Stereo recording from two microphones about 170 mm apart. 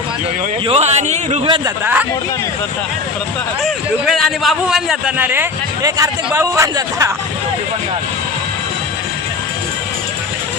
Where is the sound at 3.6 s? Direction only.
Centre (ahead or behind); by 7.1 s 15° right (ahead or behind).